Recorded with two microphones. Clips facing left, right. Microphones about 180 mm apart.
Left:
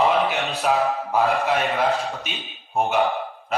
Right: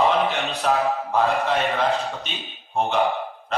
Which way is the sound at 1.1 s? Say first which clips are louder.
Left 1 dB; 10° left (ahead or behind).